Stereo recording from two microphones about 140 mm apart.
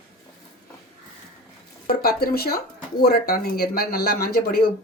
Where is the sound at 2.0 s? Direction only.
90° left.